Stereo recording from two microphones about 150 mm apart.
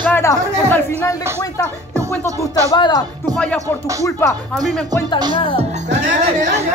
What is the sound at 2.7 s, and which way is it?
Speech, 25° left (ahead or behind).